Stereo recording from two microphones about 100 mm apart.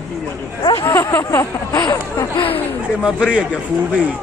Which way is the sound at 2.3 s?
65° left (ahead or behind).